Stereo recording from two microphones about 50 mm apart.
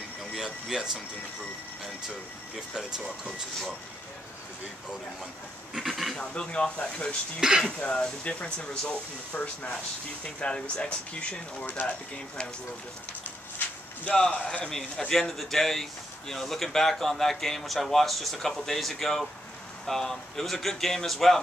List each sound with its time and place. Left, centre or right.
0.3 s speech: centre
2.7 s speech: centre
5.8 s a sound: centre
6.1 s speech: left
7.3 s speech: centre
7.6 s speech: centre
9.3 s speech: left
10.2 s speech: centre
13.6 s a sound: left
14.4 s speech: centre